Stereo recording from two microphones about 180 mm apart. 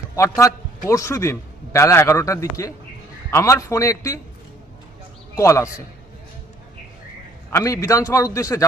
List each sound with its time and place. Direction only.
0.2 s a man's voice: 15° left (ahead or behind)
5.4 s a man's voice: 15° left (ahead or behind)
7.5 s a man's voice: 15° left (ahead or behind)